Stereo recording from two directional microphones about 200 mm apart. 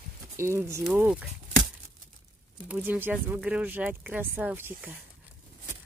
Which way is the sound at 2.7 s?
10° right (ahead or behind).